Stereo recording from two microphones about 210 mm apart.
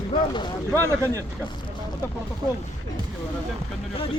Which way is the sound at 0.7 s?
15° right (ahead or behind).